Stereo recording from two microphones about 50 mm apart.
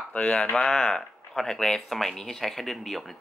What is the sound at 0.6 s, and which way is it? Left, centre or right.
Speech, centre.